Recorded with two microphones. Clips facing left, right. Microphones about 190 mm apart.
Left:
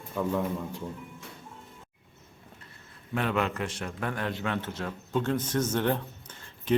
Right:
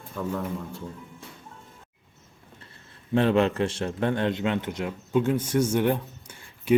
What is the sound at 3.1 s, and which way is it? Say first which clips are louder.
A man's voice: right 7 dB; 30° right (ahead or behind).